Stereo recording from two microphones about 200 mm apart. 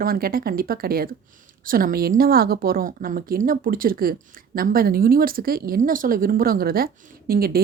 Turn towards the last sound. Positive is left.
turn(degrees=-50)  # may be behind; listen again after turning